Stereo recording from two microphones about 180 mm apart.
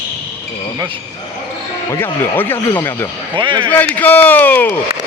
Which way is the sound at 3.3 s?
25° right (ahead or behind).